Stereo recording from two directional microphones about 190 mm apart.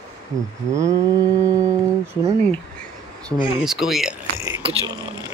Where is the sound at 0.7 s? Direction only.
15° right (ahead or behind).